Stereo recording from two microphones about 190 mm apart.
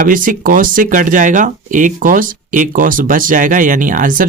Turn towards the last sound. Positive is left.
turn(degrees=-45)  # may be behind; listen again after turning